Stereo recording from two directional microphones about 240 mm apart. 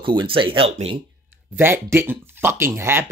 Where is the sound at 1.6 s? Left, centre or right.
Centre.